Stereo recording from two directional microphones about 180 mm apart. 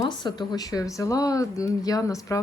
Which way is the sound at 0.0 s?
25° left (ahead or behind).